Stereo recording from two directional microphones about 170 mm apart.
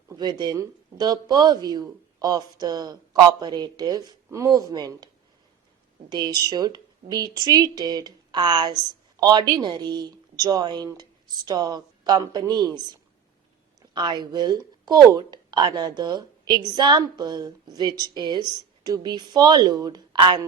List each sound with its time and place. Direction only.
0.1 s speech: 25° right (ahead or behind)
6.1 s speech: 25° right (ahead or behind)
13.9 s speech: 25° right (ahead or behind)